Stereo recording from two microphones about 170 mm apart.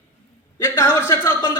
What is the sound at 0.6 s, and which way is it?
Speech, 15° left (ahead or behind).